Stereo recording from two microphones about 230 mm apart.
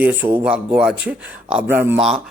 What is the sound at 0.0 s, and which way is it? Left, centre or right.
Speech, centre.